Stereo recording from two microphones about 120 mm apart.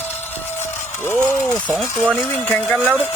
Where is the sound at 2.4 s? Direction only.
10° left (ahead or behind).